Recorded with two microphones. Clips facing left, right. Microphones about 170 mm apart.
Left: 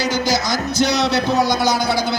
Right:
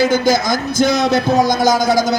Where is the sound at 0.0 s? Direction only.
50° right (ahead or behind).